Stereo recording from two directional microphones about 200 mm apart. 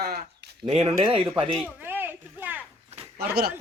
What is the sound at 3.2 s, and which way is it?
Speech, 50° right (ahead or behind).